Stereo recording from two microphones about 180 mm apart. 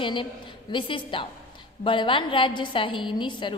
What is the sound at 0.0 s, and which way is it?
A woman's voice, 25° left (ahead or behind).